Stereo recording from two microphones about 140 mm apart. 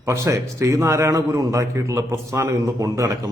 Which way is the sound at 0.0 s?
20° right (ahead or behind).